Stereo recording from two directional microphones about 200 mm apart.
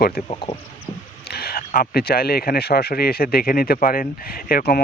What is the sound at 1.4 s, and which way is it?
Speech, 50° left (ahead or behind).